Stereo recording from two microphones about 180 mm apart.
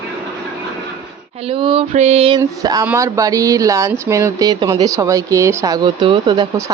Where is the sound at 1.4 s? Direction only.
30° right (ahead or behind).